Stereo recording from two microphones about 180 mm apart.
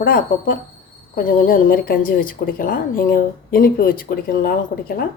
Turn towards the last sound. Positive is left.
turn(degrees=50)  # may be behind; listen again after turning